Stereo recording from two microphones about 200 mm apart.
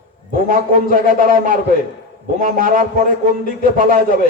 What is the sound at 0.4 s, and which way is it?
A man's voice, 40° right (ahead or behind).